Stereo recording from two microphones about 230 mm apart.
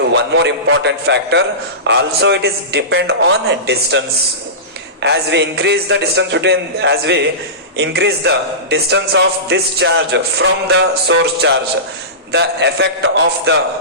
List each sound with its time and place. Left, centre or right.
0.1 s a man's voice: right
5.0 s a man's voice: right